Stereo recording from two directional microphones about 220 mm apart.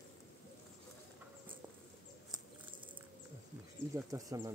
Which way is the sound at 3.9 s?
15° right (ahead or behind).